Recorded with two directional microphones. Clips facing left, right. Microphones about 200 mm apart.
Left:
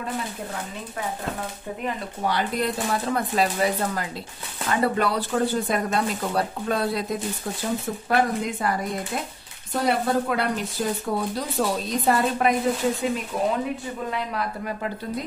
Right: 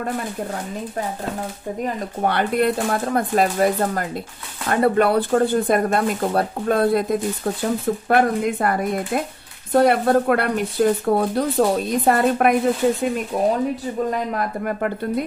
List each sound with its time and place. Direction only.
2.0 s speech: 60° right (ahead or behind)
13.3 s speech: 45° right (ahead or behind)